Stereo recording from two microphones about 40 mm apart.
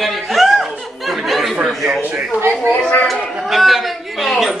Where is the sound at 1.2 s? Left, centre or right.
Centre.